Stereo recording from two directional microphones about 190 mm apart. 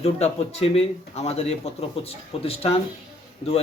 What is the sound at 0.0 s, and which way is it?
Speech, 35° left (ahead or behind).